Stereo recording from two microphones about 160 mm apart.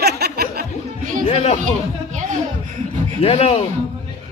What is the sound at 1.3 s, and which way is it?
Speech, 40° left (ahead or behind).